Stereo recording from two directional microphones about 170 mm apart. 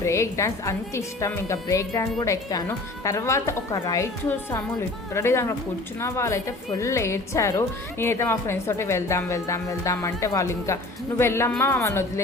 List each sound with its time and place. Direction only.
0.0 s a woman's voice: 15° left (ahead or behind)